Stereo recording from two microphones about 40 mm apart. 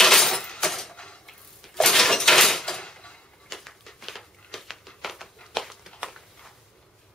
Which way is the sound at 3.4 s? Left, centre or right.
Centre.